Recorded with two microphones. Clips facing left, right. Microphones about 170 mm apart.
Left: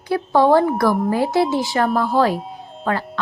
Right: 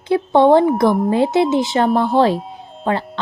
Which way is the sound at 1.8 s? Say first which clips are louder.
Right 3 dB; centre (ahead or behind).